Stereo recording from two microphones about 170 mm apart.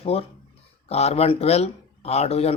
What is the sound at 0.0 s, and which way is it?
Speech, 35° left (ahead or behind).